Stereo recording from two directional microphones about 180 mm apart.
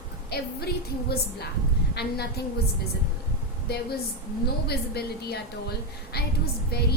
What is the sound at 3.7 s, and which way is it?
A woman's voice, 60° left (ahead or behind).